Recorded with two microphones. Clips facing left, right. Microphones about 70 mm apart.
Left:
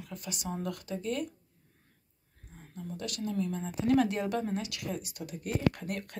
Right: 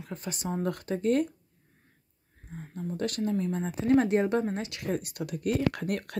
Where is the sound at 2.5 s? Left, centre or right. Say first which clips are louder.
Right 11 dB; right.